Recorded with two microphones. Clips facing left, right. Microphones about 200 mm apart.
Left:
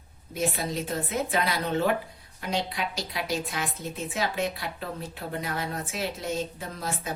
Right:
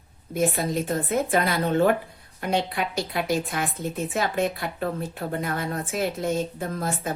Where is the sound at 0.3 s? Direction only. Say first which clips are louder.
Right 5 dB; 50° right (ahead or behind).